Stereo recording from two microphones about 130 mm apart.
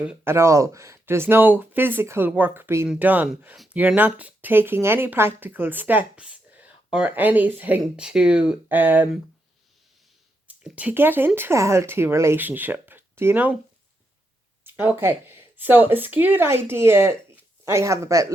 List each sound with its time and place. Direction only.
0.3 s speech: 20° right (ahead or behind)
10.4 s speech: 10° right (ahead or behind)
14.6 s speech: 15° right (ahead or behind)